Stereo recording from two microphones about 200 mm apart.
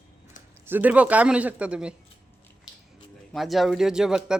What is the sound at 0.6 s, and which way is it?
Speech, 10° right (ahead or behind).